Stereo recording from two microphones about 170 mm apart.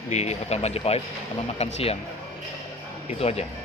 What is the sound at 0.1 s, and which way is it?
Speech, 40° left (ahead or behind).